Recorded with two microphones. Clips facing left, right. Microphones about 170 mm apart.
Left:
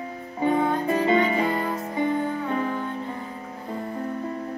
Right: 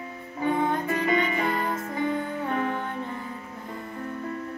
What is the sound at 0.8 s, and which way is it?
Music, 25° left (ahead or behind).